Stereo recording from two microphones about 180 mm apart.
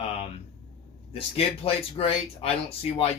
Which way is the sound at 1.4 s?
35° left (ahead or behind).